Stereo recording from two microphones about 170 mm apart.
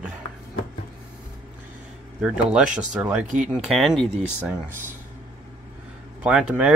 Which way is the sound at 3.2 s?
45° right (ahead or behind).